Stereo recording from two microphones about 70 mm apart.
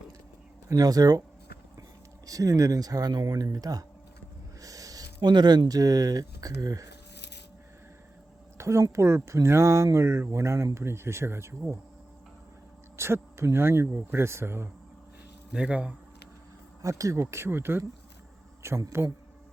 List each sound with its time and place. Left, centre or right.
0.7 s speech: right
2.2 s speech: right
8.5 s speech: right
13.0 s speech: right
15.5 s speech: centre
16.8 s speech: right